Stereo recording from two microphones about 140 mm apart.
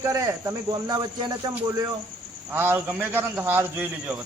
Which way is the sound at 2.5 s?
15° right (ahead or behind).